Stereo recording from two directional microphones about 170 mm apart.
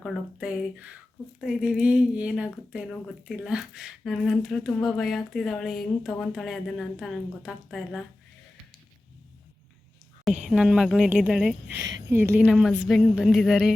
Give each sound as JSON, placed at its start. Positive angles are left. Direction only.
{"t": 0.0, "sound": "a woman's voice", "side_deg": -5}
{"t": 10.4, "sound": "a woman's voice", "side_deg": -5}
{"t": 11.8, "sound": "speech", "side_deg": -90}
{"t": 12.0, "sound": "a woman's voice", "side_deg": -15}